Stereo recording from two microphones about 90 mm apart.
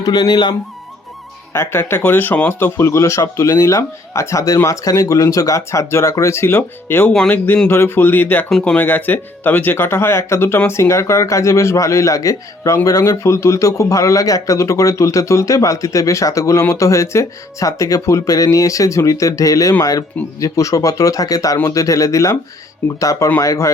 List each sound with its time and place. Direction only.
0.0 s speech: 50° left (ahead or behind)
1.5 s a man's voice: 25° left (ahead or behind)
7.1 s speech: 10° left (ahead or behind)
7.7 s a man's voice: 25° left (ahead or behind)